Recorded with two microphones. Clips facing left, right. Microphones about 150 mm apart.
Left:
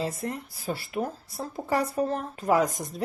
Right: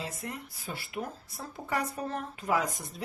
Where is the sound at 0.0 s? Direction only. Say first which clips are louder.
Left 8 dB; 35° left (ahead or behind).